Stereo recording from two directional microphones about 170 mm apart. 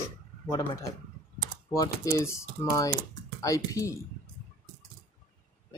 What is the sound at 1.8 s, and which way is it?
Speech, 15° left (ahead or behind).